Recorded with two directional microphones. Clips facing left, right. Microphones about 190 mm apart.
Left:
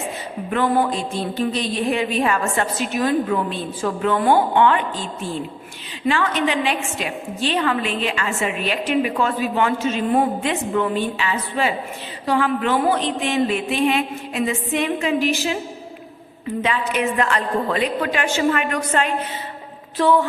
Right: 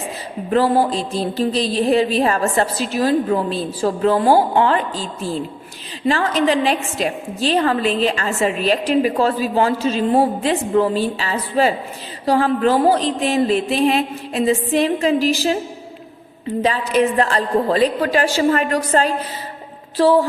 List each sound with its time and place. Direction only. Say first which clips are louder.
0.5 s a woman's voice: right 4 dB; 35° right (ahead or behind)
16.6 s a woman's voice: right 5 dB; 35° right (ahead or behind)